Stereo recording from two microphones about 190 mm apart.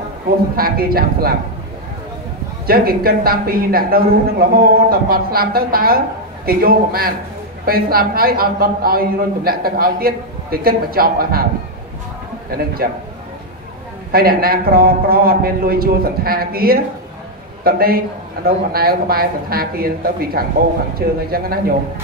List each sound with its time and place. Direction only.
0.6 s a man's voice: 50° right (ahead or behind)
2.6 s a man's voice: 50° right (ahead or behind)
14.1 s a man's voice: 50° right (ahead or behind)